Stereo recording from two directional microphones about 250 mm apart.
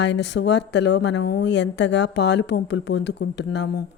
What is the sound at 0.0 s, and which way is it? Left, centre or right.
Speech, left.